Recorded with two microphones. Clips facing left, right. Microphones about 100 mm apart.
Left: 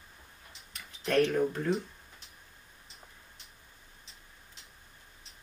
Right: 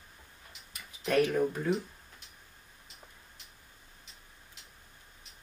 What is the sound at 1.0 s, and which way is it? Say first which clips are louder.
Speech: even; 10° right (ahead or behind).